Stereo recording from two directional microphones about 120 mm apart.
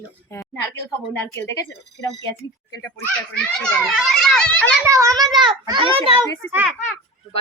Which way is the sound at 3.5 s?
5° left (ahead or behind).